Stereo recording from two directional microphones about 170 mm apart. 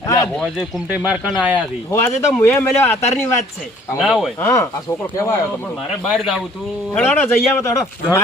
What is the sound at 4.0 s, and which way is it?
Speech, centre (ahead or behind).